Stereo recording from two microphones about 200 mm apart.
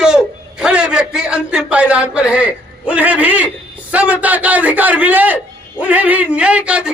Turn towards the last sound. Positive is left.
turn(degrees=-5)  # may be behind; listen again after turning